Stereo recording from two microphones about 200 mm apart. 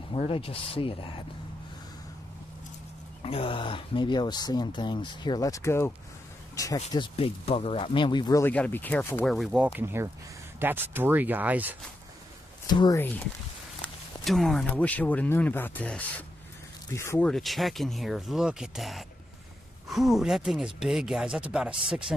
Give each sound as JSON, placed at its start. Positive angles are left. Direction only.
{"t": 0.1, "sound": "speech", "side_deg": 30}
{"t": 3.2, "sound": "speech", "side_deg": 30}
{"t": 12.6, "sound": "speech", "side_deg": 20}
{"t": 14.2, "sound": "speech", "side_deg": 0}
{"t": 17.3, "sound": "speech", "side_deg": 0}